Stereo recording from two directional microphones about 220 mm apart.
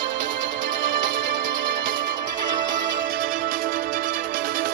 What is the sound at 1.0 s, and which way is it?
Music, 40° right (ahead or behind).